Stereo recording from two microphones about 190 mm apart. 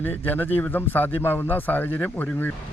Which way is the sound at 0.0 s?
10° left (ahead or behind).